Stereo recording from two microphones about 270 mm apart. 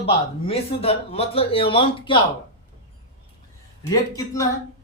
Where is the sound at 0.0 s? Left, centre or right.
Left.